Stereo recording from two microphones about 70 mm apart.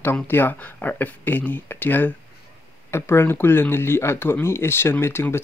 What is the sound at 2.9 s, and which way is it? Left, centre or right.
Speech, left.